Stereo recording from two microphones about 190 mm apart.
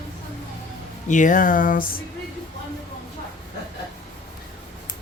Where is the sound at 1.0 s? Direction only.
40° left (ahead or behind).